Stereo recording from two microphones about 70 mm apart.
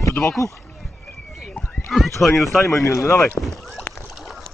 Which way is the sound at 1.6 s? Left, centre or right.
Left.